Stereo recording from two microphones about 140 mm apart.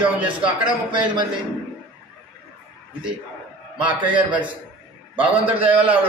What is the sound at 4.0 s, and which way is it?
A man's voice, 10° right (ahead or behind).